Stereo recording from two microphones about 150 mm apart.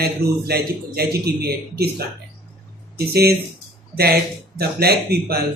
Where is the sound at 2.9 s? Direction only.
90° right.